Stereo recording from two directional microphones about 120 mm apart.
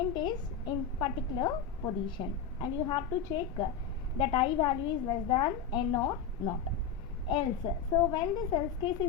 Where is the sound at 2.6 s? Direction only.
40° left (ahead or behind).